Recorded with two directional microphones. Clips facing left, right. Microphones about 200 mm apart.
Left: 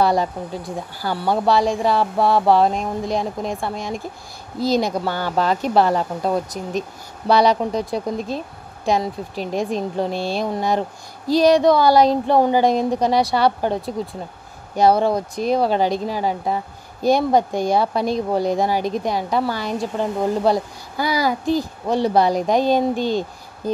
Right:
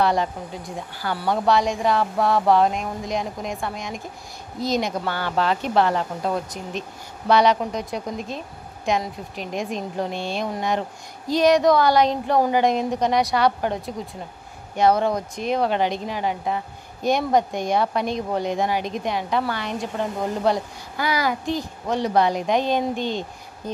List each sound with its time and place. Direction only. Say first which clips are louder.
0.0 s speech: left 3 dB; 35° left (ahead or behind)